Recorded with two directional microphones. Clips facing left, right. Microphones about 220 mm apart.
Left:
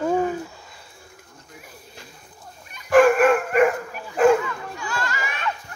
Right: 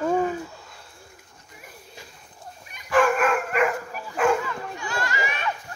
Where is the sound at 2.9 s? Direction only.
45° left (ahead or behind).